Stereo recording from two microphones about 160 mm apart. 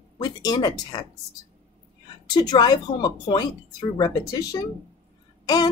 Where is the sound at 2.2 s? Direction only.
25° left (ahead or behind).